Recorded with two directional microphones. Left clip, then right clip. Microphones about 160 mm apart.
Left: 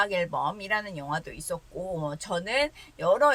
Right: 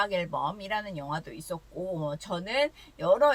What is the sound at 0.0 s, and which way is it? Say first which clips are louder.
Speech: left 2 dB; 25° left (ahead or behind).